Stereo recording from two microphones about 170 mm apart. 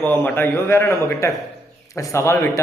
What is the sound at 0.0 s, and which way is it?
A man's voice, 10° left (ahead or behind).